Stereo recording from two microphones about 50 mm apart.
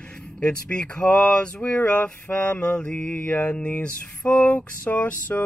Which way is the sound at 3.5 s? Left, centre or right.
Left.